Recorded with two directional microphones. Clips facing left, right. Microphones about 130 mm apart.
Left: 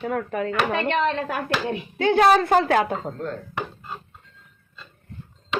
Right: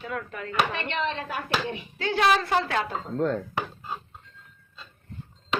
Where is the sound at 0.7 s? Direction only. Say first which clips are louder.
Left 7 dB; 45° left (ahead or behind).